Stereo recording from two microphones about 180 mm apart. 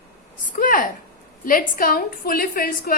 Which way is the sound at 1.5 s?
50° left (ahead or behind).